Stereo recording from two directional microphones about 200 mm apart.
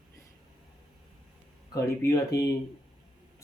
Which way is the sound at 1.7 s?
15° left (ahead or behind).